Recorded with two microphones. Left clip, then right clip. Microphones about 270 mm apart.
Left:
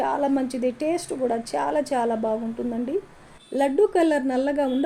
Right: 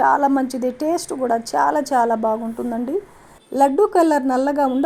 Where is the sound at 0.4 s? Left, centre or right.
Right.